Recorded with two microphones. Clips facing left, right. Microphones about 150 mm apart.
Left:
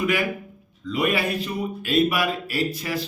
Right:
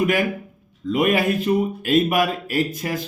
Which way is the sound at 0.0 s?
45° right (ahead or behind).